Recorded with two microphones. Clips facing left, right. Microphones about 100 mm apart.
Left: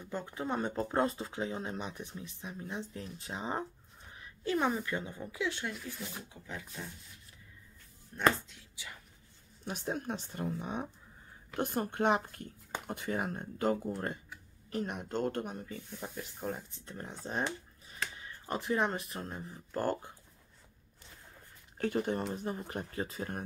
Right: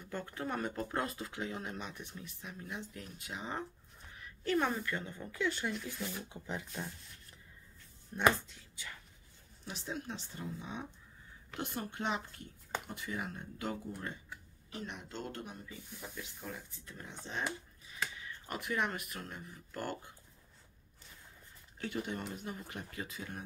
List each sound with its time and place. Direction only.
0.0 s speech: 20° left (ahead or behind)
4.1 s a sound: 25° left (ahead or behind)
4.6 s speech: 15° left (ahead or behind)
5.5 s speech: centre (ahead or behind)
6.2 s speech: 25° right (ahead or behind)
8.1 s speech: 15° right (ahead or behind)
9.7 s speech: 45° left (ahead or behind)
21.7 s speech: 45° left (ahead or behind)